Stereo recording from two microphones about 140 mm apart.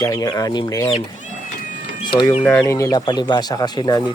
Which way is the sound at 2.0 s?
30° left (ahead or behind).